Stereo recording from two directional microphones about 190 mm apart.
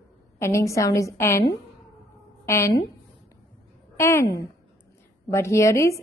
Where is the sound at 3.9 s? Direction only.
15° left (ahead or behind).